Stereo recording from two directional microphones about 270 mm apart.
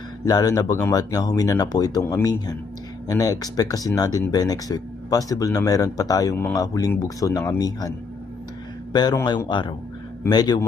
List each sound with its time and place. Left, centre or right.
0.3 s speech: centre